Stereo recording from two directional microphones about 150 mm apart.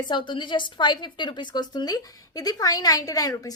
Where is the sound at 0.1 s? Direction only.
30° left (ahead or behind).